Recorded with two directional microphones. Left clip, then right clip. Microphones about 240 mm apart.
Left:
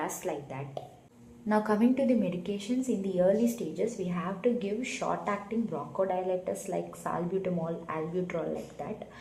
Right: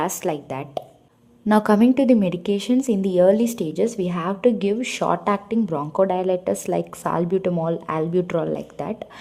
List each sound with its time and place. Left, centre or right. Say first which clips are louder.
0.0 s a woman's voice: right 10 dB; right